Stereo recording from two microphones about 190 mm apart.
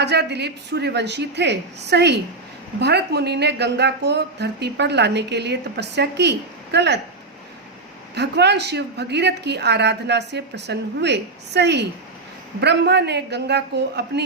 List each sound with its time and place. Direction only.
0.0 s speech: 60° right (ahead or behind)
8.1 s speech: 60° right (ahead or behind)